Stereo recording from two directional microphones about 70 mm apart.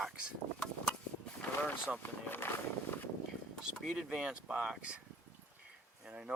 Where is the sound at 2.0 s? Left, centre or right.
Left.